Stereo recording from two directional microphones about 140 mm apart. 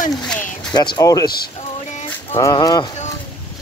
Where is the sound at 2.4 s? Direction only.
30° left (ahead or behind).